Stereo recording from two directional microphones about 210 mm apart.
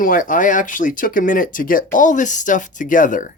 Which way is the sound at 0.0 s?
40° left (ahead or behind).